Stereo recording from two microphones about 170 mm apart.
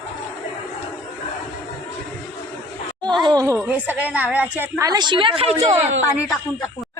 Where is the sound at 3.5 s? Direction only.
10° right (ahead or behind); by 5.7 s 40° right (ahead or behind).